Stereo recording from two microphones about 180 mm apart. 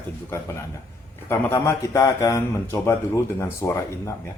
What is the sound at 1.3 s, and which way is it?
A man's voice, 15° left (ahead or behind).